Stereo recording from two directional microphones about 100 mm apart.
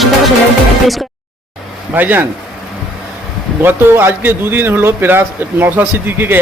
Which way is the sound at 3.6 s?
20° right (ahead or behind).